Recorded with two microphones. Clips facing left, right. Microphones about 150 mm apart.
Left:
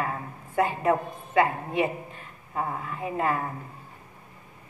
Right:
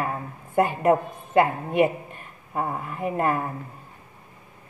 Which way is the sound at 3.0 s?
55° right (ahead or behind).